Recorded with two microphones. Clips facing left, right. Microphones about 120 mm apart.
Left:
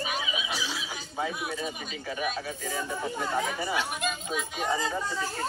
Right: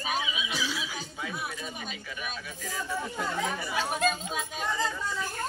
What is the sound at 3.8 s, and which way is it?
Speech, 35° right (ahead or behind).